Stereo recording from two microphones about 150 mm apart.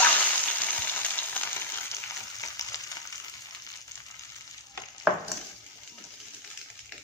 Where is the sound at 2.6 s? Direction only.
25° left (ahead or behind).